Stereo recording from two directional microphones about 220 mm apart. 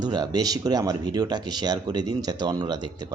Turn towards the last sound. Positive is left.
turn(degrees=-20)  # may be behind; listen again after turning